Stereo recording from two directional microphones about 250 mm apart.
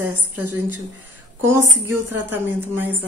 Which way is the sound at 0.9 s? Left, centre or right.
Right.